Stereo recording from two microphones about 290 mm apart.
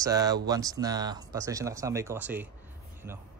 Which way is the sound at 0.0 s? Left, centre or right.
Centre.